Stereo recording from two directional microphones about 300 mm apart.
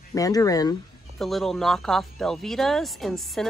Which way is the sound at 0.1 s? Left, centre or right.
Centre.